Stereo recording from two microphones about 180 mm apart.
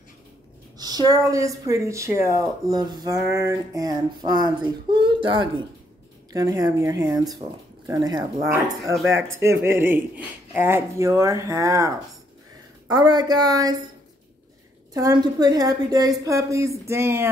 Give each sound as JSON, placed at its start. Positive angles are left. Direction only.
{"t": 0.7, "sound": "speech", "side_deg": -20}
{"t": 12.9, "sound": "speech", "side_deg": -20}
{"t": 15.0, "sound": "speech", "side_deg": -20}